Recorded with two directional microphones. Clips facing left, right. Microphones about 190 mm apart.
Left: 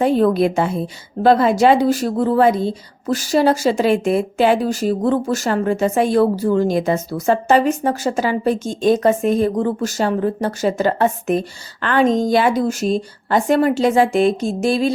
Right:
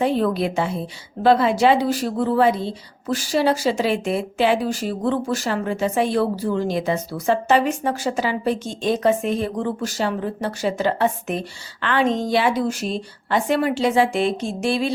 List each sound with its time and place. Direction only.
0.0 s a woman's voice: 45° left (ahead or behind)